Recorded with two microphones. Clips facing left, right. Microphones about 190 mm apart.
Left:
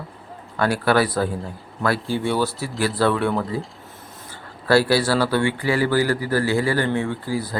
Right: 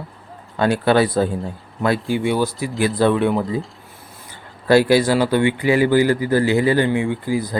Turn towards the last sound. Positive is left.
turn(degrees=-15)  # may be behind; listen again after turning